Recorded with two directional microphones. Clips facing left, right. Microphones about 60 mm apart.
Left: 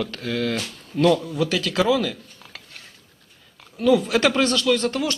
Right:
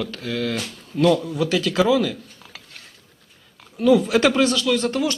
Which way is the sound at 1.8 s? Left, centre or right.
Centre.